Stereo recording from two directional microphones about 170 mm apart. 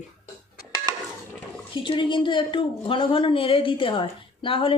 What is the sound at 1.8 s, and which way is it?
A woman's voice, 30° left (ahead or behind).